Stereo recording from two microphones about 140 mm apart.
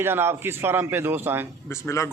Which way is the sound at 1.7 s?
20° left (ahead or behind).